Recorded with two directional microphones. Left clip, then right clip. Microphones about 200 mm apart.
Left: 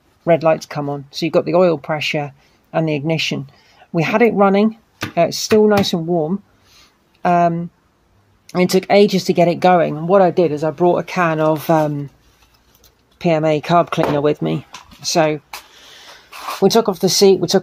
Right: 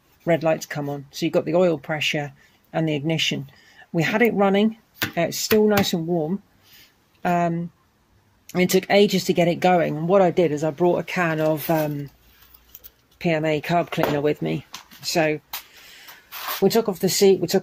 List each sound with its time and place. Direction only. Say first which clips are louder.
0.2 s speech: left 7 dB; centre (ahead or behind)
13.2 s speech: left 6 dB; 5° left (ahead or behind)
16.5 s speech: left 6 dB; centre (ahead or behind)